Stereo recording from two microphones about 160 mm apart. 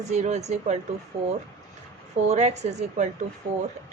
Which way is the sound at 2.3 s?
45° right (ahead or behind).